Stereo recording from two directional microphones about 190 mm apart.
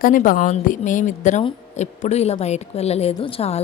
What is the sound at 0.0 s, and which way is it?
A woman's voice, 45° left (ahead or behind).